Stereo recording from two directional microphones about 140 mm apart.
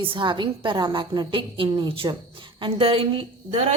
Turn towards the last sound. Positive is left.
turn(degrees=-40)  # may be behind; listen again after turning